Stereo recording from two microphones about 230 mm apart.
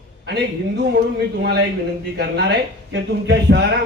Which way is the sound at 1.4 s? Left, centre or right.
Right.